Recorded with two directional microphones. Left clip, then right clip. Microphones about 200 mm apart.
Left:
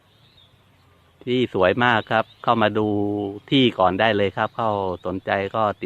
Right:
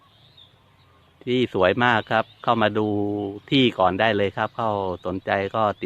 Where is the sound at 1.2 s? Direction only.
5° left (ahead or behind).